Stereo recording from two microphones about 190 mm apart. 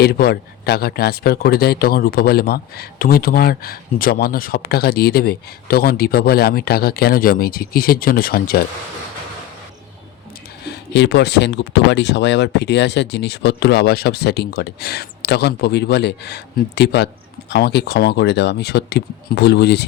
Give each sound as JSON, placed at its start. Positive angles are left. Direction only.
{"t": 0.0, "sound": "speech", "side_deg": 55}
{"t": 10.7, "sound": "speech", "side_deg": 65}